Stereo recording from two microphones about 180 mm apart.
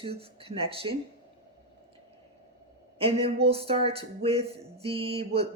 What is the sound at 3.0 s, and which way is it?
Speech, 30° right (ahead or behind).